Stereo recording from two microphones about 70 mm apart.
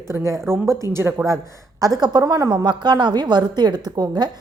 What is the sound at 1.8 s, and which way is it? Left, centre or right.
Speech, right.